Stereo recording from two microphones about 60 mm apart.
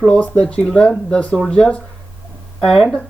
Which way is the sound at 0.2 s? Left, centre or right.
Left.